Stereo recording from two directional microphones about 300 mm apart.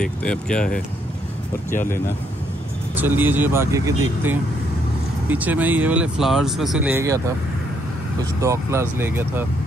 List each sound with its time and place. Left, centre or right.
0.0 s speech: centre
1.7 s speech: left
3.0 s speech: centre
8.4 s speech: centre